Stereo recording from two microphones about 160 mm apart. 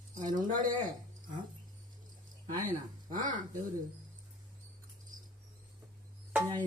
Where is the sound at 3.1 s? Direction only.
55° right (ahead or behind).